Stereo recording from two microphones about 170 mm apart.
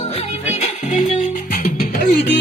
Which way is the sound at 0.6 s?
40° left (ahead or behind).